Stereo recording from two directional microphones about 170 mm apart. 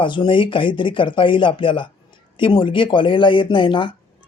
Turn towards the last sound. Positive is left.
turn(degrees=30)  # may be behind; listen again after turning